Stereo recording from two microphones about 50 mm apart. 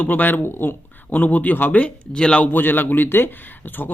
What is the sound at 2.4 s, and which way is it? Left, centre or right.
Speech, left.